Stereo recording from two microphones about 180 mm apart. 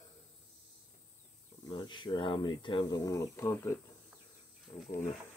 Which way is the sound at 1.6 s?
25° left (ahead or behind).